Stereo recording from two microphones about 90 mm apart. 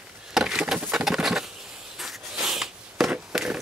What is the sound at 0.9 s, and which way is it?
Patter, 5° right (ahead or behind).